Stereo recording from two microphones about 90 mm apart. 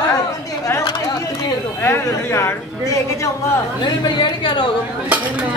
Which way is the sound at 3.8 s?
60° left (ahead or behind).